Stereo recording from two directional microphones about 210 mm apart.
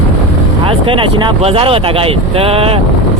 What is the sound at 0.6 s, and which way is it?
Speech, 25° right (ahead or behind).